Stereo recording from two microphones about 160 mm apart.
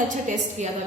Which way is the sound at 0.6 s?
45° right (ahead or behind).